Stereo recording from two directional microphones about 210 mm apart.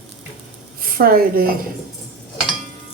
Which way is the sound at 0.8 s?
45° right (ahead or behind).